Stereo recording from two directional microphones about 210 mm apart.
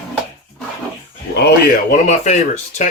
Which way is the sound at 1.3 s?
50° left (ahead or behind).